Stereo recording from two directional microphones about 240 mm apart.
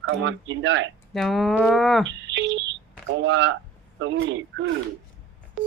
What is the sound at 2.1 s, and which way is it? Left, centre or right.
Speech, right.